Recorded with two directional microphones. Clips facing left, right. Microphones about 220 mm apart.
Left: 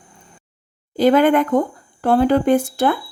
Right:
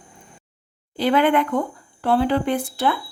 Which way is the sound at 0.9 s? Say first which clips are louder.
Left 5 dB; 45° left (ahead or behind).